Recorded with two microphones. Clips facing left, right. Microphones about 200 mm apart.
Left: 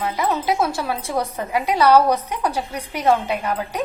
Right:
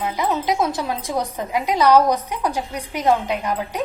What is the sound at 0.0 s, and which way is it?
A woman's voice, 15° right (ahead or behind).